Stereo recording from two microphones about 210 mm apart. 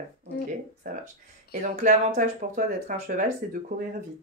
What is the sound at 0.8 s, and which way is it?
Speech, 40° right (ahead or behind).